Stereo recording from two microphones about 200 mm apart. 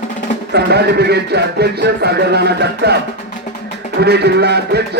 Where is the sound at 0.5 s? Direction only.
55° right (ahead or behind).